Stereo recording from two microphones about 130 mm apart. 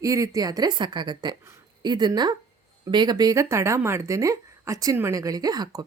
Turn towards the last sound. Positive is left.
turn(degrees=-30)  # may be behind; listen again after turning